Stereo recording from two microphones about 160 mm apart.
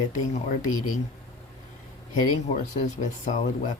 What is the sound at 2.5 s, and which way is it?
Speech, 50° left (ahead or behind).